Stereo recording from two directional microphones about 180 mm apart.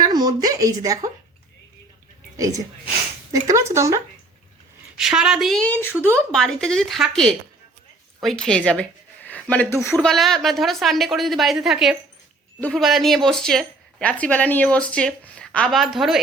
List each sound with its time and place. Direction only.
0.0 s a sound: 20° right (ahead or behind)
2.3 s speech: 20° right (ahead or behind)
4.9 s speech: 5° right (ahead or behind); by 10.1 s 10° left (ahead or behind)
10.1 s speech: centre (ahead or behind)